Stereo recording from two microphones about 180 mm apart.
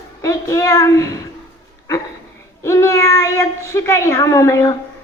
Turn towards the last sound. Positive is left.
turn(degrees=15)  # may be behind; listen again after turning